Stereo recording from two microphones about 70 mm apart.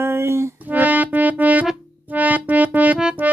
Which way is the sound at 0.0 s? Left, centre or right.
Right.